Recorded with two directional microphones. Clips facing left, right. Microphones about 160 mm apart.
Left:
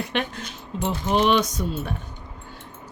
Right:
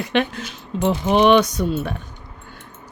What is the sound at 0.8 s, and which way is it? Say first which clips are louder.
Speech: right 5 dB; 65° right (ahead or behind).